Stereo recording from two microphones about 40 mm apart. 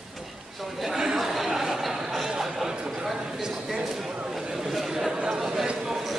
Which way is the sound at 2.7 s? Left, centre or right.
Right.